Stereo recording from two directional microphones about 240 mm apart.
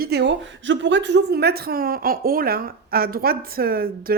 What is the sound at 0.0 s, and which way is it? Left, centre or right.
A woman's voice, right.